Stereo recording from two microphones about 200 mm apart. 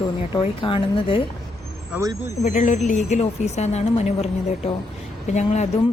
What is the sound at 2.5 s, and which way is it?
Speech, 40° left (ahead or behind).